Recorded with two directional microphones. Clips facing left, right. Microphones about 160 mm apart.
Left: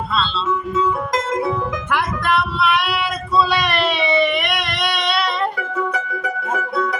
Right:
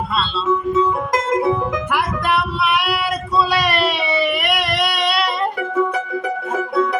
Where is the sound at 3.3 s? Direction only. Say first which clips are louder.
Even; 10° right (ahead or behind).